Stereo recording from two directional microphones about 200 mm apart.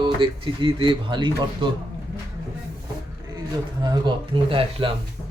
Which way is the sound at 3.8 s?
25° right (ahead or behind).